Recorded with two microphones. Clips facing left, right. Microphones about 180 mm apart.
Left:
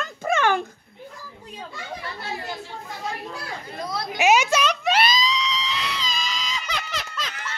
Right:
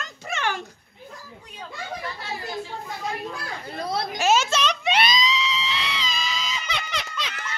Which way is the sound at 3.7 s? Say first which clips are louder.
Right 3 dB; 30° right (ahead or behind).